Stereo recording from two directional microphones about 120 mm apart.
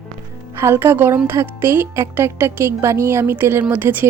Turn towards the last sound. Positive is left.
turn(degrees=-15)  # may be behind; listen again after turning